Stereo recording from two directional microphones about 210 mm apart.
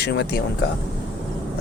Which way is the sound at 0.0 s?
55° left (ahead or behind).